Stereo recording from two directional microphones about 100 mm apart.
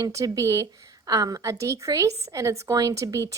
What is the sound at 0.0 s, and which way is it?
A woman's voice, 35° right (ahead or behind).